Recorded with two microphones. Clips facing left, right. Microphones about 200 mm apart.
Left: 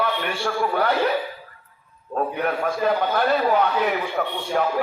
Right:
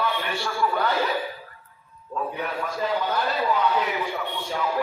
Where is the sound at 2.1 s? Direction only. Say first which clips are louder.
Left 5 dB; 60° left (ahead or behind).